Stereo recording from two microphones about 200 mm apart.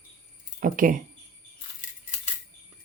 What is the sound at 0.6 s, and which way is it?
Speech, 40° right (ahead or behind).